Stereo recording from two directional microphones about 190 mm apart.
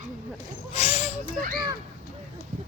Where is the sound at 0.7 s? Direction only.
30° left (ahead or behind).